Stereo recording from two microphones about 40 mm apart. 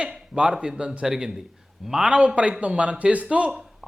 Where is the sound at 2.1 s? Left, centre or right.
Right.